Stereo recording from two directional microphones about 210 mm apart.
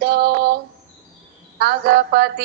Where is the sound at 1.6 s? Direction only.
45° right (ahead or behind).